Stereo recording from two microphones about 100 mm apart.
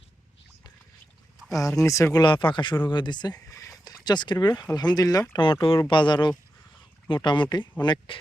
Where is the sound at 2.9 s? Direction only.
50° left (ahead or behind); by 3.9 s 35° left (ahead or behind).